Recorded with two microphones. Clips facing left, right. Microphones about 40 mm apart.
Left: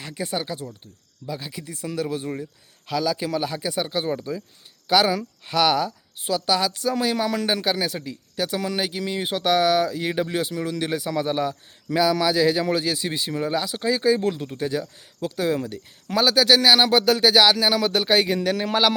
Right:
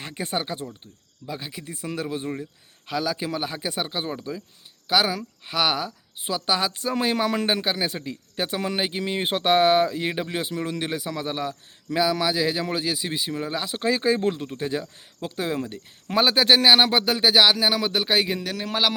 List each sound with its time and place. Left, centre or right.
0.0 s speech: right
1.3 s a man's voice: centre
4.0 s a man's voice: centre
13.7 s speech: right
14.2 s a man's voice: centre
14.4 s speech: centre
14.7 s a man's voice: centre
16.1 s a man's voice: right; by 18.9 s centre